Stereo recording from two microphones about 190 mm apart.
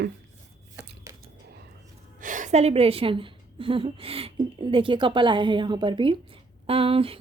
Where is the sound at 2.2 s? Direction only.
40° right (ahead or behind).